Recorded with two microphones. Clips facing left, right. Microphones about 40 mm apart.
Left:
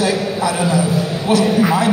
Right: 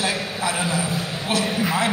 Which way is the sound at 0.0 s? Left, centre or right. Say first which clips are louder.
Left 7 dB; right.